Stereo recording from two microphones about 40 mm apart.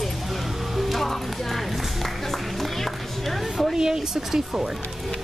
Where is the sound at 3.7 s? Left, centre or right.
Centre.